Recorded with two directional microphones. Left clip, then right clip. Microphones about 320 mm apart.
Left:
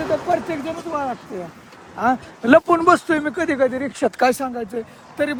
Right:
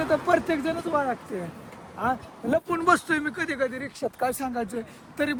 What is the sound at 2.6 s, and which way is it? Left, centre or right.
Speech, centre.